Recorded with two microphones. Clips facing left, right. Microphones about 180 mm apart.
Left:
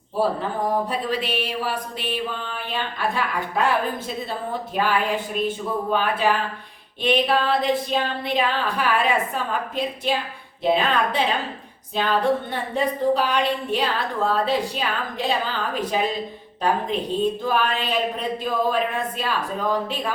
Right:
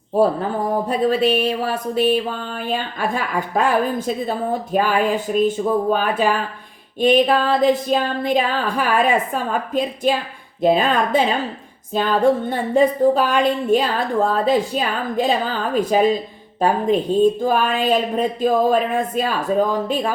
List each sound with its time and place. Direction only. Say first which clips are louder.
0.9 s a woman's voice: right 8 dB; 45° right (ahead or behind)